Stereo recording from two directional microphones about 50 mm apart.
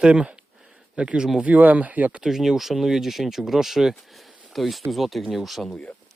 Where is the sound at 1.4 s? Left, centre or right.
Right.